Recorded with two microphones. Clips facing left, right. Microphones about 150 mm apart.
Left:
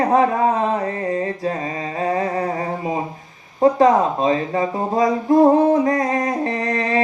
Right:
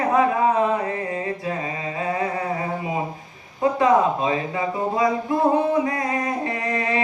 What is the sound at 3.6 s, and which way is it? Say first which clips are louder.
Speech: left 4 dB; 40° left (ahead or behind).